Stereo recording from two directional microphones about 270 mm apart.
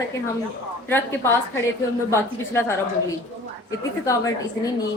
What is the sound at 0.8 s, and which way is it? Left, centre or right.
A woman's voice, centre.